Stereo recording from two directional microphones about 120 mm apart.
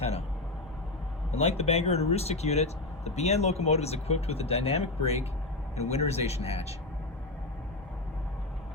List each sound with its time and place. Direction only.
1.3 s speech: 60° left (ahead or behind)